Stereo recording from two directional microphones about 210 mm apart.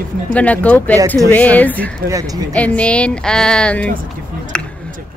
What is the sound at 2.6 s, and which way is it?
Speech, 5° left (ahead or behind).